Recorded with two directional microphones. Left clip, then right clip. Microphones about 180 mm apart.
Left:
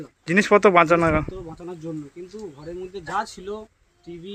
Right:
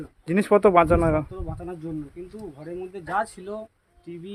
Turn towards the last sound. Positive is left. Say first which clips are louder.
# even
turn(degrees=-15)  # may be behind; listen again after turning